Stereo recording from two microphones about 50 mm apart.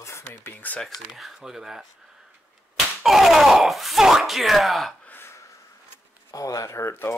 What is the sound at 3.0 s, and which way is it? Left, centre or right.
Groan, centre.